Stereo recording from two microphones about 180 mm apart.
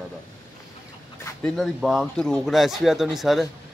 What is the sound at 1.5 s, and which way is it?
Speech, centre (ahead or behind).